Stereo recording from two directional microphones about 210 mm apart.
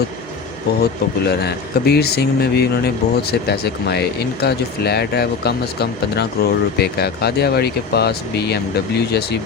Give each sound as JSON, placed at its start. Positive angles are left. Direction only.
{"t": 0.8, "sound": "speech", "side_deg": 50}